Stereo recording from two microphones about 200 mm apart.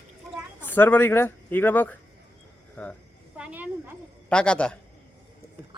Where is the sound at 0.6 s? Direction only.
10° left (ahead or behind).